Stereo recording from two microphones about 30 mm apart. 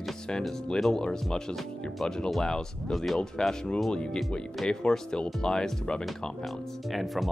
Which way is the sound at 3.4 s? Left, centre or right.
Left.